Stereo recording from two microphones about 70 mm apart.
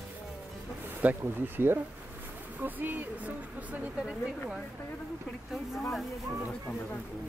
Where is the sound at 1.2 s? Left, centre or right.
Right.